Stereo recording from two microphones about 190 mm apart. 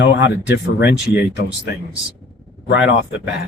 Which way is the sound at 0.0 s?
70° left (ahead or behind).